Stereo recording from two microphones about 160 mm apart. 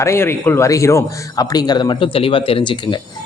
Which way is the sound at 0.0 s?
15° left (ahead or behind).